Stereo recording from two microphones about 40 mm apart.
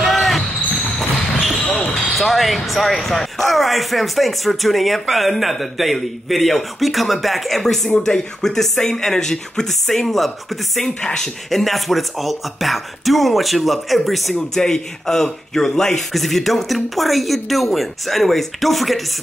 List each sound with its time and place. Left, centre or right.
0.0 s basketball bounce: centre
0.9 s a sound: centre
2.1 s speech: centre
8.0 s speech: centre
11.0 s speech: left
11.5 s speech: centre
14.3 s speech: centre